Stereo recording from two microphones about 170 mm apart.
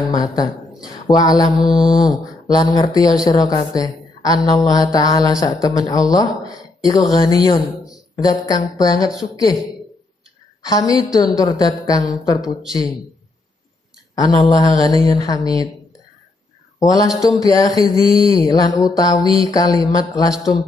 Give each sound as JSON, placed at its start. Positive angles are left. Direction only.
{"t": 0.1, "sound": "a woman's voice", "side_deg": 20}
{"t": 10.6, "sound": "a woman's voice", "side_deg": 20}
{"t": 14.1, "sound": "a woman's voice", "side_deg": 20}
{"t": 17.2, "sound": "a woman's voice", "side_deg": 20}